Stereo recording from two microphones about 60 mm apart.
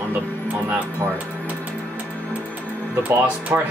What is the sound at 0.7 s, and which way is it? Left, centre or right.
Speech, right.